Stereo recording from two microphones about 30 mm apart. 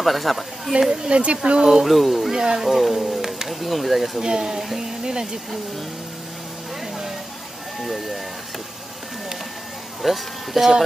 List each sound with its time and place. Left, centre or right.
0.0 s speech: centre
0.7 s speech: right
1.1 s speech: right
1.6 s speech: centre
1.9 s speech: centre
2.3 s speech: right
2.9 s speech: centre
4.2 s speech: right
7.8 s speech: centre
10.0 s speech: centre